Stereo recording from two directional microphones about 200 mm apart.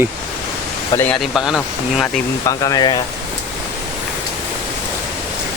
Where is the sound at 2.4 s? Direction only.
20° left (ahead or behind).